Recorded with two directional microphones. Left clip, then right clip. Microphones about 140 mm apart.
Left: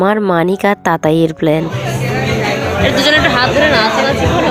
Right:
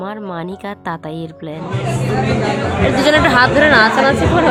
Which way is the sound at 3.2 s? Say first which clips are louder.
Even; 35° right (ahead or behind).